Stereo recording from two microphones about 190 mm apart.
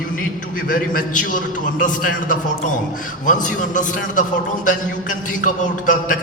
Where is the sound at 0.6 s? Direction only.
45° left (ahead or behind).